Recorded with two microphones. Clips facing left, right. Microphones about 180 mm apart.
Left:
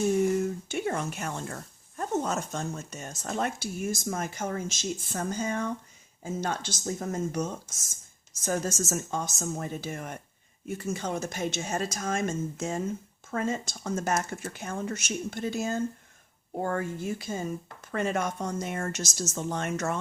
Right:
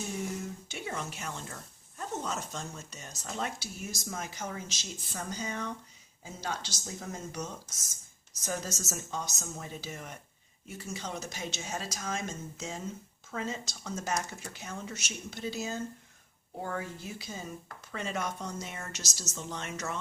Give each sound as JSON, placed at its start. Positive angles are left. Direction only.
{"t": 0.7, "sound": "a woman's voice", "side_deg": 50}